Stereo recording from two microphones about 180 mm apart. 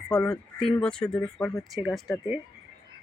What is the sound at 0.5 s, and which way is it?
Speech, 30° left (ahead or behind).